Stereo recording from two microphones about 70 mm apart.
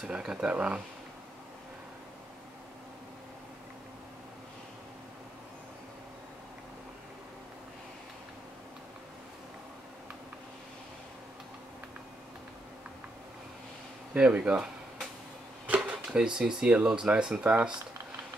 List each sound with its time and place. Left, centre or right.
0.0 s speech: centre
14.1 s speech: centre
15.6 s a sound: centre
16.3 s speech: centre